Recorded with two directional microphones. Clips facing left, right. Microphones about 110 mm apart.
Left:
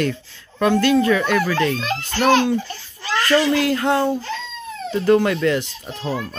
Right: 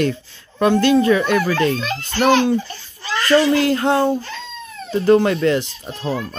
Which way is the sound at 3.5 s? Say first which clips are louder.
Right 2 dB; 30° right (ahead or behind).